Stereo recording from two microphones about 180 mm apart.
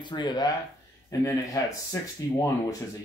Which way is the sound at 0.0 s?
25° left (ahead or behind).